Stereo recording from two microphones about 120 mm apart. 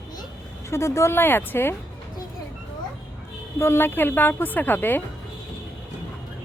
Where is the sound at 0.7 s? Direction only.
25° left (ahead or behind).